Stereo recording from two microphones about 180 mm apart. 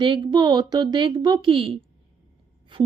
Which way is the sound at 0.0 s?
25° right (ahead or behind).